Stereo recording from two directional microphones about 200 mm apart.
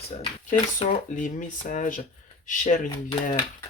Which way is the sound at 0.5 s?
40° left (ahead or behind).